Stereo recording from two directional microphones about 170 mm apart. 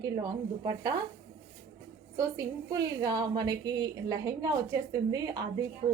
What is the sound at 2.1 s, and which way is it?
A woman's voice, 20° right (ahead or behind).